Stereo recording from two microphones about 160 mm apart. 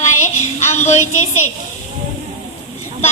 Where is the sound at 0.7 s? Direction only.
45° left (ahead or behind).